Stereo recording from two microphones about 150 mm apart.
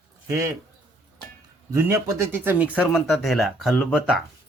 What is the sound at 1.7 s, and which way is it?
Speech, 20° right (ahead or behind).